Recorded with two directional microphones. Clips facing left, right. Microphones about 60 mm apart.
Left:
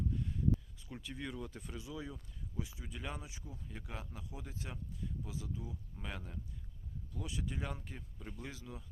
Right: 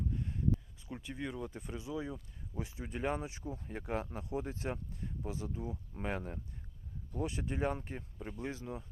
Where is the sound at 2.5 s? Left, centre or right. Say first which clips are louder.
Right 5 dB; right.